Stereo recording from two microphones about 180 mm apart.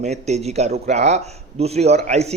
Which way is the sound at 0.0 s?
40° right (ahead or behind).